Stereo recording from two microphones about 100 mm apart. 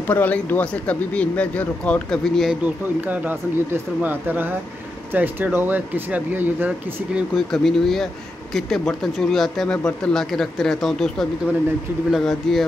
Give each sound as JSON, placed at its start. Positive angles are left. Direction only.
{"t": 0.0, "sound": "speech", "side_deg": 15}
{"t": 2.6, "sound": "speech", "side_deg": -15}
{"t": 7.2, "sound": "speech", "side_deg": 0}